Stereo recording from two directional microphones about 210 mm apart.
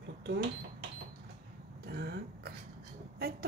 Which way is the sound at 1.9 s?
50° right (ahead or behind).